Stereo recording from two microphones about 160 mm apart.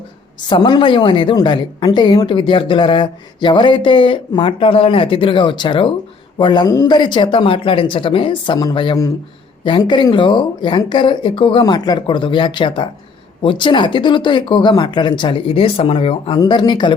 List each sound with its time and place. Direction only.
0.4 s a woman's voice: 30° left (ahead or behind)